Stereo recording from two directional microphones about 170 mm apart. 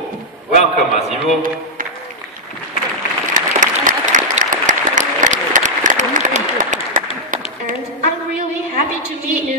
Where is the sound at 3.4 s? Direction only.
50° right (ahead or behind).